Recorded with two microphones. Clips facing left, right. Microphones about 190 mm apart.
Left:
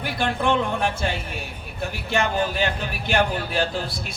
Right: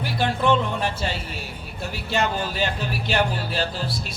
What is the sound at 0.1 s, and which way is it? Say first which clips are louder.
Speech: right 1 dB; 55° left (ahead or behind).